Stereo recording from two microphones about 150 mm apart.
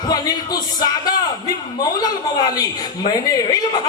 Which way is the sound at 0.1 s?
25° left (ahead or behind).